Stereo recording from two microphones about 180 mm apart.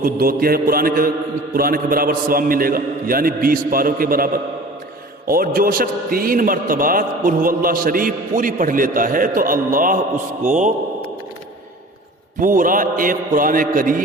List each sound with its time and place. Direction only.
0.0 s mantra: 55° right (ahead or behind)
1.5 s a man's voice: 55° right (ahead or behind)
12.4 s a man's voice: 50° right (ahead or behind)